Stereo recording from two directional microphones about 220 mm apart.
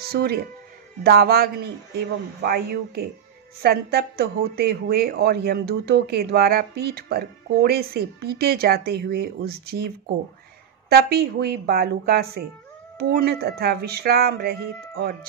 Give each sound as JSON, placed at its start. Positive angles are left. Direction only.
{"t": 0.0, "sound": "a woman's voice", "side_deg": -45}